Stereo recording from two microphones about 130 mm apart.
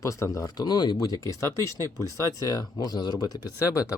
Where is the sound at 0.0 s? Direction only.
25° left (ahead or behind).